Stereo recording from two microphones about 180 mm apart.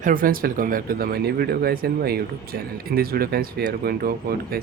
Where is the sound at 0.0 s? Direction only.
50° right (ahead or behind).